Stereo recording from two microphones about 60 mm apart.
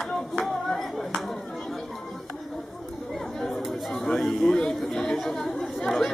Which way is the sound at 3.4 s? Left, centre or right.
Centre.